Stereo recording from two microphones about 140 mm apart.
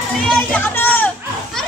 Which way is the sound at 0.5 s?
15° left (ahead or behind).